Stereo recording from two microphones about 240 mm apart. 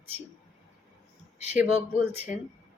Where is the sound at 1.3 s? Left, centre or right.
Left.